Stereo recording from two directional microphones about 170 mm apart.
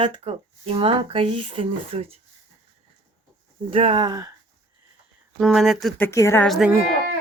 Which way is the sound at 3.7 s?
30° right (ahead or behind).